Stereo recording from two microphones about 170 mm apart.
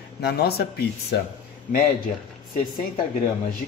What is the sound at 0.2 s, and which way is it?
Speech, 70° left (ahead or behind).